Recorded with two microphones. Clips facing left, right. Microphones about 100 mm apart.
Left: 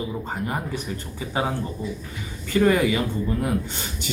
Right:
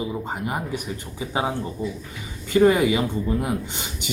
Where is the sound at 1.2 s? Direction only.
15° right (ahead or behind).